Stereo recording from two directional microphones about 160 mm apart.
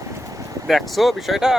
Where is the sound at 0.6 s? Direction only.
Centre (ahead or behind).